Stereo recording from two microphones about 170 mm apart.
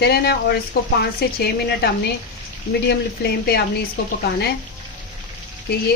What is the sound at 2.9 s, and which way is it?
Speech, 70° left (ahead or behind).